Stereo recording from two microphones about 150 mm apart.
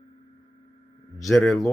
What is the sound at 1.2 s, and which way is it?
Speech, centre (ahead or behind).